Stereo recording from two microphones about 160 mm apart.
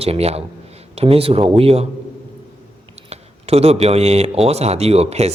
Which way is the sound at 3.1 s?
40° right (ahead or behind).